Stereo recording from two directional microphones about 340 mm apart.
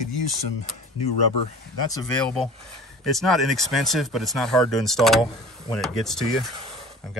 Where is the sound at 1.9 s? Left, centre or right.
Centre.